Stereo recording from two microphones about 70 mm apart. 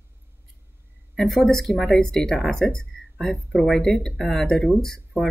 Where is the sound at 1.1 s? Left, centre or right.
Centre.